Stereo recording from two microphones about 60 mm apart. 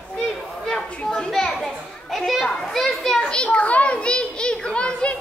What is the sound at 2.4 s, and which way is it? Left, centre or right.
Children playing, centre.